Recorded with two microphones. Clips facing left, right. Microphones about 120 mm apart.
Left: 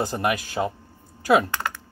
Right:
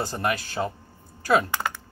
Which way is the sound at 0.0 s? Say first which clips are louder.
Left 3 dB; 15° left (ahead or behind).